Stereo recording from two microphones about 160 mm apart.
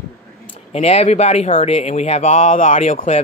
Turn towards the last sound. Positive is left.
turn(degrees=50)  # may be behind; listen again after turning